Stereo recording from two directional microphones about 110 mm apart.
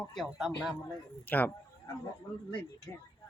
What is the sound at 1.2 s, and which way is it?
Speech, 15° left (ahead or behind).